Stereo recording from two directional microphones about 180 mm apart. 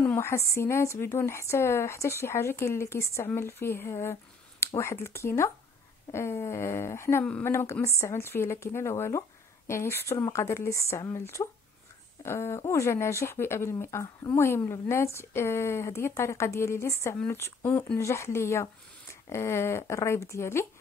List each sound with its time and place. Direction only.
0.0 s speech: 15° left (ahead or behind)